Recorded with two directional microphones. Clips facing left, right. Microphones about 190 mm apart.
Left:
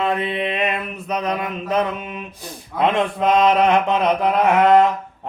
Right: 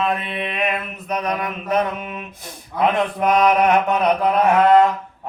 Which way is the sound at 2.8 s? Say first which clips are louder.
Even; 25° left (ahead or behind).